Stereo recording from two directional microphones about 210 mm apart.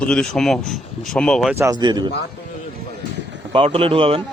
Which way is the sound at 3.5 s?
25° right (ahead or behind).